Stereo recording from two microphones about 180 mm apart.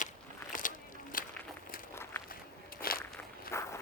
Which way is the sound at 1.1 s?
50° left (ahead or behind).